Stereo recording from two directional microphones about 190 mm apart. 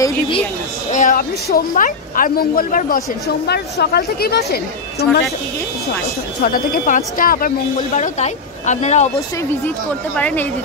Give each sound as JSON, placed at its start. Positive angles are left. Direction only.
{"t": 0.9, "sound": "a man's voice", "side_deg": 45}
{"t": 6.4, "sound": "a man's voice", "side_deg": 50}
{"t": 10.1, "sound": "a woman's voice", "side_deg": 10}